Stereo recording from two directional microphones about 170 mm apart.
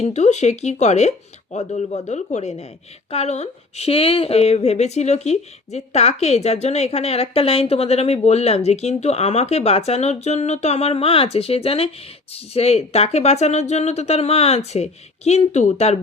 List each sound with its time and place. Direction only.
0.0 s speech: 40° left (ahead or behind)